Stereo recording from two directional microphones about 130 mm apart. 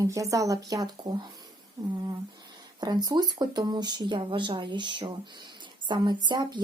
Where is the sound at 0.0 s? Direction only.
25° right (ahead or behind).